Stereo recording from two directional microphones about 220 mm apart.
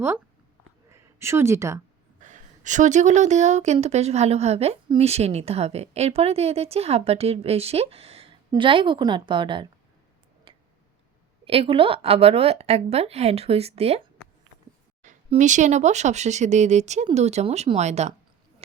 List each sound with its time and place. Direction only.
0.9 s speech: 10° right (ahead or behind)
2.2 s a woman's voice: 35° right (ahead or behind)
10.5 s tick-tock: 25° right (ahead or behind)
11.4 s a woman's voice: 25° right (ahead or behind)
15.0 s speech: 35° right (ahead or behind)